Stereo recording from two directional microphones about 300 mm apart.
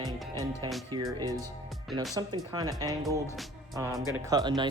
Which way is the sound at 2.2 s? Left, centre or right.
Centre.